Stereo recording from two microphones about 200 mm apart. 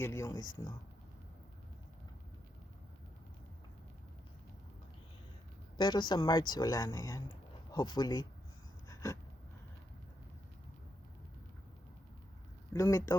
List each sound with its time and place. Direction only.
0.0 s speech: 15° left (ahead or behind)
5.7 s a woman's voice: 20° left (ahead or behind)
8.9 s writing: 15° left (ahead or behind)
12.7 s speech: 15° left (ahead or behind)